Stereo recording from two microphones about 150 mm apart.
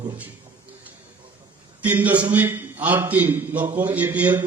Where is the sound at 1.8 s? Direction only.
10° right (ahead or behind).